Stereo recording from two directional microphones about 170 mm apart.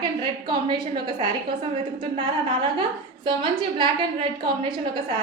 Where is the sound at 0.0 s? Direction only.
30° right (ahead or behind).